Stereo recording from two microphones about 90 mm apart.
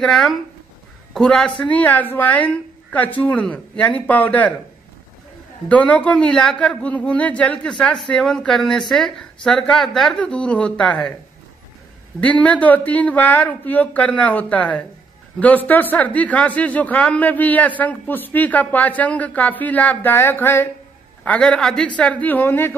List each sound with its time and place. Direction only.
0.0 s speech: 5° left (ahead or behind)
5.7 s speech: 15° left (ahead or behind)
12.2 s speech: 15° left (ahead or behind)